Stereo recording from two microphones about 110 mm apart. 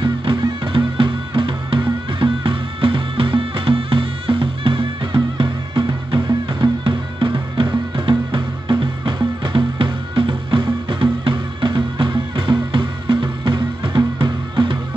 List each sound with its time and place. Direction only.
0.0 s music: 45° right (ahead or behind)